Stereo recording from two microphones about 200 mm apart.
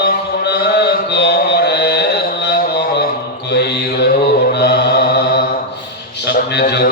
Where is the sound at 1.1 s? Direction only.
55° left (ahead or behind).